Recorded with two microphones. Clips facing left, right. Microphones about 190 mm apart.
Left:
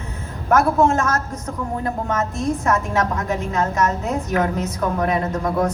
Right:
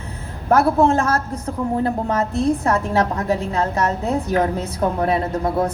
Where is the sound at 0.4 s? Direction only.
35° right (ahead or behind).